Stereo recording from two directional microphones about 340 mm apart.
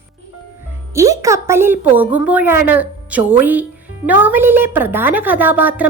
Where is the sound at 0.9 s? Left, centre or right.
Centre.